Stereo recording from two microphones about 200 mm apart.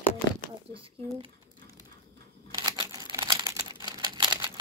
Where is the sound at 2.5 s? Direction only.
20° right (ahead or behind).